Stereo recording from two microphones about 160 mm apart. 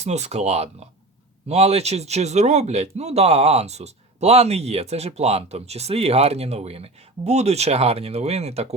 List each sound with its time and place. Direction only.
0.0 s speech: 45° right (ahead or behind)